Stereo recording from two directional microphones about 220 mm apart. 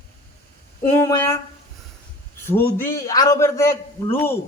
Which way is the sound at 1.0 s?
15° left (ahead or behind).